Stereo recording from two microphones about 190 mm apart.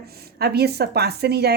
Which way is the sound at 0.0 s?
55° right (ahead or behind).